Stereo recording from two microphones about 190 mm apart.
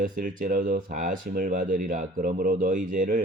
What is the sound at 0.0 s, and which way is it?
Speech, 45° right (ahead or behind).